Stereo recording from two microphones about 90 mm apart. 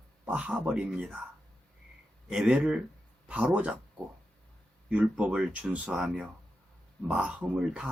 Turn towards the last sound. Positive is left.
turn(degrees=-10)  # may be behind; listen again after turning